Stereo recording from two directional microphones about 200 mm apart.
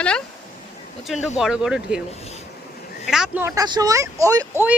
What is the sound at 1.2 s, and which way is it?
Speech, 5° right (ahead or behind).